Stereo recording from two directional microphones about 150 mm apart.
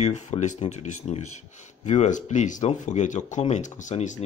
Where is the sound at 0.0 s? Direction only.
50° left (ahead or behind).